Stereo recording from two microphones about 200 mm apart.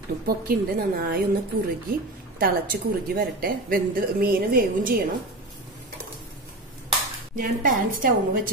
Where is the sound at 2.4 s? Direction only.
45° right (ahead or behind).